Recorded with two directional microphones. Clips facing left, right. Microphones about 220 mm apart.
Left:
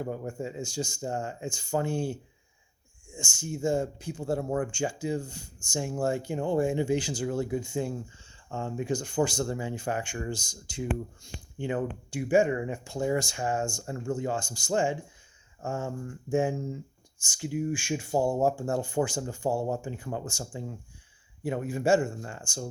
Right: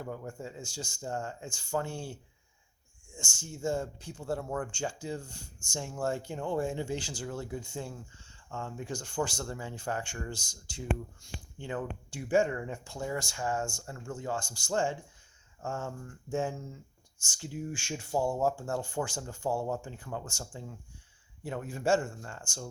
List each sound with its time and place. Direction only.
0.0 s speech: 20° left (ahead or behind)
3.2 s speech: 15° left (ahead or behind)